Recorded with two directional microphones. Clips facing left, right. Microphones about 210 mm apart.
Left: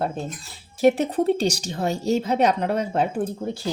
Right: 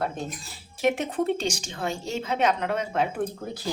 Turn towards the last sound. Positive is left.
turn(degrees=30)  # may be behind; listen again after turning